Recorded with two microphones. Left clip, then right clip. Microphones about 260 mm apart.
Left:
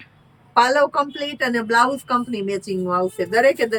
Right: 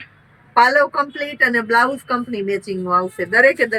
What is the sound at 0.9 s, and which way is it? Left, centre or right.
A woman's voice, centre.